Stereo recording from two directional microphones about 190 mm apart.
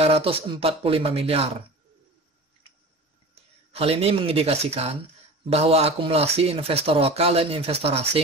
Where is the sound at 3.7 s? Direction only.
30° right (ahead or behind).